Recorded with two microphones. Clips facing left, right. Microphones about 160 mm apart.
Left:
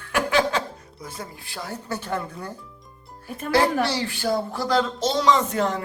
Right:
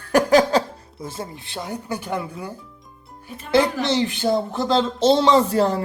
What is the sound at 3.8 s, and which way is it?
A man's voice, 20° right (ahead or behind).